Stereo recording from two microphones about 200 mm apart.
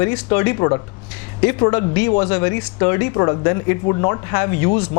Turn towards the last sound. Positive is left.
turn(degrees=20)  # may be behind; listen again after turning